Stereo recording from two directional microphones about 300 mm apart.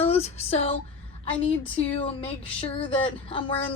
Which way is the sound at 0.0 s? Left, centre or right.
Left.